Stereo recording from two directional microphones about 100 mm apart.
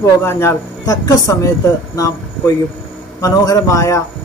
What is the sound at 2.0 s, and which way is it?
Speech, 35° left (ahead or behind).